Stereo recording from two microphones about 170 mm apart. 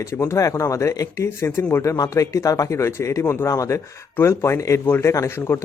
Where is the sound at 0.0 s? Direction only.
15° left (ahead or behind).